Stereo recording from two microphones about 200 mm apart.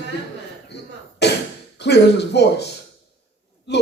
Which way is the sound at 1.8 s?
60° left (ahead or behind).